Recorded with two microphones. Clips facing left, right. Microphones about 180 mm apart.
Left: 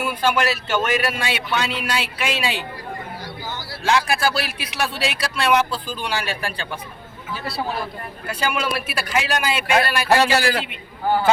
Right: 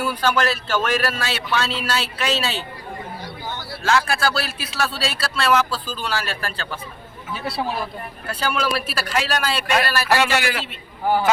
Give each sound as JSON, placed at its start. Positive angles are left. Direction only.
{"t": 0.0, "sound": "a man's voice", "side_deg": 10}
{"t": 3.8, "sound": "a man's voice", "side_deg": 15}
{"t": 8.3, "sound": "a man's voice", "side_deg": 15}
{"t": 10.2, "sound": "a man's voice", "side_deg": 35}